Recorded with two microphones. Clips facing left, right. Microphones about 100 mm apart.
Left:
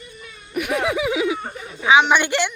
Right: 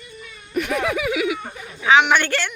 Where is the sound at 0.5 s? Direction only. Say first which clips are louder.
Even; 15° left (ahead or behind).